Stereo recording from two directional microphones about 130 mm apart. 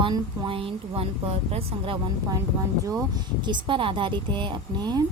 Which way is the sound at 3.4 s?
40° right (ahead or behind).